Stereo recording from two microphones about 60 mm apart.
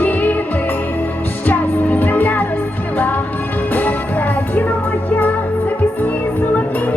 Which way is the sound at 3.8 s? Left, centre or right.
Left.